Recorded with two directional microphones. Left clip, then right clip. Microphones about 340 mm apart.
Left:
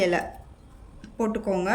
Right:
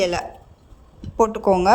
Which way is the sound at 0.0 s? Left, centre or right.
Centre.